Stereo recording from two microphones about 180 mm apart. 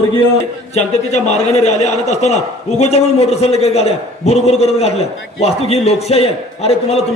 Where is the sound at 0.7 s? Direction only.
35° left (ahead or behind).